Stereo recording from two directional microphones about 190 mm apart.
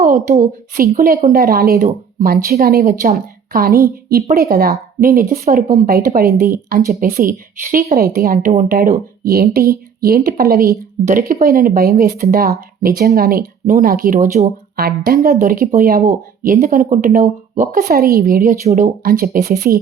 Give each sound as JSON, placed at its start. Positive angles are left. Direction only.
{"t": 0.0, "sound": "a sound", "side_deg": -50}
{"t": 0.9, "sound": "a woman's voice", "side_deg": -45}
{"t": 14.8, "sound": "a woman's voice", "side_deg": -50}
{"t": 19.0, "sound": "a woman's voice", "side_deg": -50}